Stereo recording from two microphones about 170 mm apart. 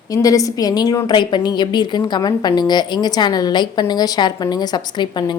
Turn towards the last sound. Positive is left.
turn(degrees=25)  # may be behind; listen again after turning